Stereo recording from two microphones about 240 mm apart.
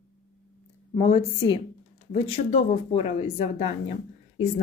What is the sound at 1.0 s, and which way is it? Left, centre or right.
A woman's voice, left.